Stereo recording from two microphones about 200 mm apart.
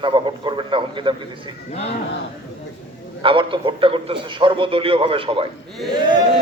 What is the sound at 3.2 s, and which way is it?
A man's voice, 25° right (ahead or behind).